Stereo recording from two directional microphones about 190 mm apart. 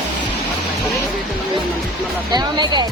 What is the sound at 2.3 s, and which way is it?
Speech, 20° right (ahead or behind).